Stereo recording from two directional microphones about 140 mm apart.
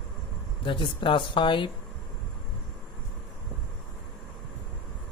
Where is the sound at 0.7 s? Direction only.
35° left (ahead or behind).